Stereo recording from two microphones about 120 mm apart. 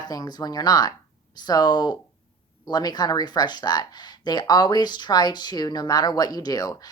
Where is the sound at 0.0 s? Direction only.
35° left (ahead or behind).